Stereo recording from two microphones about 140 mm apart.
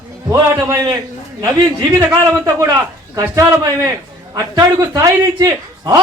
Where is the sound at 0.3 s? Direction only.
25° right (ahead or behind).